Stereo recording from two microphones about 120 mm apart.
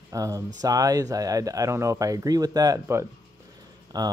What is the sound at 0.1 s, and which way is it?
Speech, 30° right (ahead or behind).